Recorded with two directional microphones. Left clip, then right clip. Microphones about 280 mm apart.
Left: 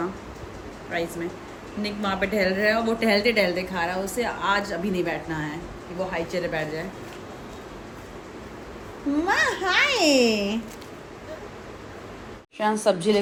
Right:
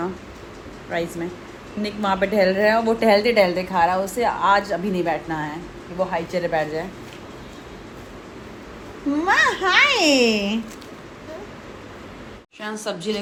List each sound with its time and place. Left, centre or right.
0.9 s a woman's voice: centre
9.2 s a child's voice: right
12.5 s a woman's voice: centre